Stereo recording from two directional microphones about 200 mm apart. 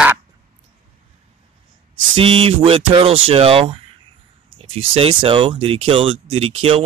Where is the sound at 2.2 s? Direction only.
25° right (ahead or behind).